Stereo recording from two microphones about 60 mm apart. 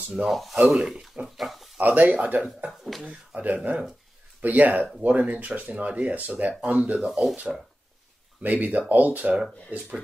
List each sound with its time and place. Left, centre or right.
0.3 s speech: centre
0.7 s speech: centre
1.8 s speech: right
2.8 s speech: centre
3.1 s speech: right
7.1 s speech: centre
7.3 s speech: centre
8.4 s speech: right